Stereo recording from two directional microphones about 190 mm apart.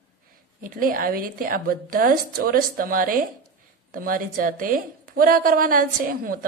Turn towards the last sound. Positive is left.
turn(degrees=-45)  # may be behind; listen again after turning